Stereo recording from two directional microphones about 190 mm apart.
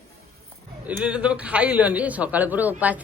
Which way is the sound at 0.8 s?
5° right (ahead or behind).